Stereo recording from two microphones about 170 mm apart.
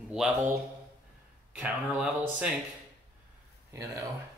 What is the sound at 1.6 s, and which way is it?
Speech, 10° right (ahead or behind).